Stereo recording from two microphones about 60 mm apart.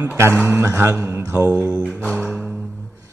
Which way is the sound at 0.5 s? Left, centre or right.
Right.